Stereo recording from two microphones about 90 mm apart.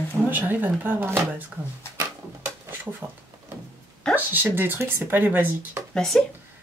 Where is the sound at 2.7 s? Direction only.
20° right (ahead or behind).